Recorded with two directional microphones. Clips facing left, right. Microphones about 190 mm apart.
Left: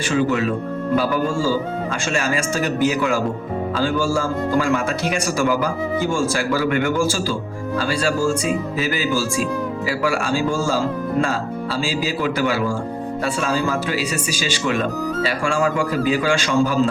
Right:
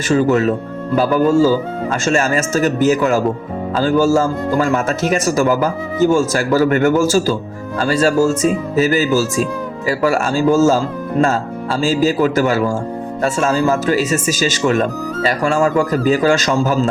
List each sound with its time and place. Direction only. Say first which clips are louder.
0.1 s a man's voice: right 6 dB; 45° right (ahead or behind)